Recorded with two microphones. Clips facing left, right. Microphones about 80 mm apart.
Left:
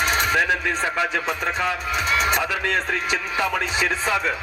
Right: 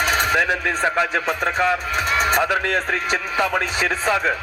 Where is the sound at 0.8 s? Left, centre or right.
Right.